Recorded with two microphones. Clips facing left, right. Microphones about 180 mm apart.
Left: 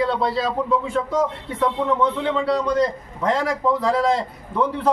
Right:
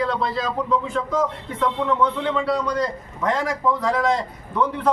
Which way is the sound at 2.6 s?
25° left (ahead or behind).